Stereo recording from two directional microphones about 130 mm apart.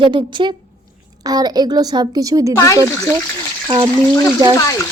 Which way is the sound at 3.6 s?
40° right (ahead or behind).